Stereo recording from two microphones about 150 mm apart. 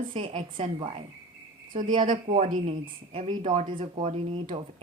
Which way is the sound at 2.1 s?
55° right (ahead or behind).